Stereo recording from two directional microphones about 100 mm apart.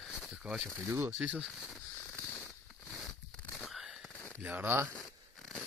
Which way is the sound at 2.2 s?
15° left (ahead or behind).